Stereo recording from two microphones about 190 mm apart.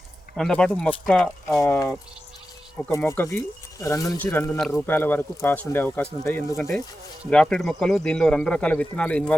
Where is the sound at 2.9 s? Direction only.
15° left (ahead or behind).